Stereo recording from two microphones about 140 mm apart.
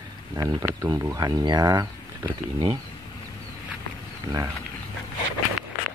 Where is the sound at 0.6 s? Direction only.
20° right (ahead or behind).